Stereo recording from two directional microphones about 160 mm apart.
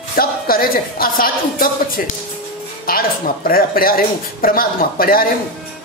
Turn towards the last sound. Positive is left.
turn(degrees=65)  # may be behind; listen again after turning